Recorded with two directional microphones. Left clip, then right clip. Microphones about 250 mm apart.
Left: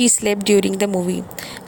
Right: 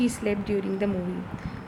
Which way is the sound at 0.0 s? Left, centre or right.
Left.